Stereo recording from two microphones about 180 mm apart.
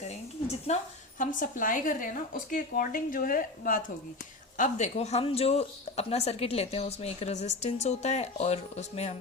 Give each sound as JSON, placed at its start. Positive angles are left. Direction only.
{"t": 0.7, "sound": "a woman's voice", "side_deg": 35}